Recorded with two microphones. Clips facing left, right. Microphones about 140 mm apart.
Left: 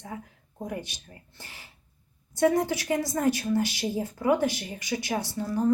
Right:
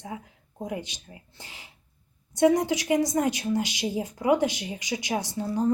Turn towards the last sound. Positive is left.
turn(degrees=-20)  # may be behind; listen again after turning